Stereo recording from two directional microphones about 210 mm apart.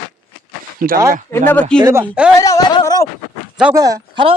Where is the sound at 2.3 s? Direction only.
15° left (ahead or behind).